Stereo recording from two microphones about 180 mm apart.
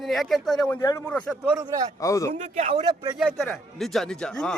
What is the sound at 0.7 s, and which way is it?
Speech, 15° left (ahead or behind).